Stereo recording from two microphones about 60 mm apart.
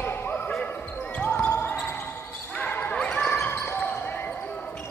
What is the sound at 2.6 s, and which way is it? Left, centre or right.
Basketball bounce, left.